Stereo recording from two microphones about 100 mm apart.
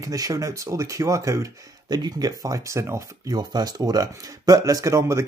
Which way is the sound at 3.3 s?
45° right (ahead or behind).